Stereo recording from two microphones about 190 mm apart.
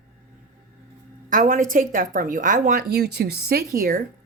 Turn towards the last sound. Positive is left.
turn(degrees=-50)  # may be behind; listen again after turning